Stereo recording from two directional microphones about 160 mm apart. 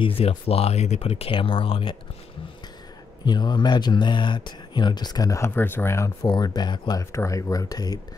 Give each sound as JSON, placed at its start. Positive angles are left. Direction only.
{"t": 0.0, "sound": "speech", "side_deg": 35}
{"t": 3.3, "sound": "speech", "side_deg": 25}